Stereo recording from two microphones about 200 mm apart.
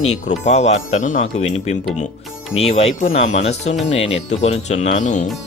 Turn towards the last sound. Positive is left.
turn(degrees=35)  # may be behind; listen again after turning